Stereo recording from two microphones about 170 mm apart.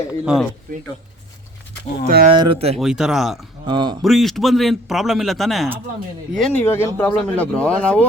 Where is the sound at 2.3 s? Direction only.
35° right (ahead or behind).